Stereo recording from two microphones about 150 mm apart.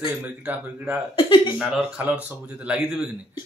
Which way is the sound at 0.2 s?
10° right (ahead or behind).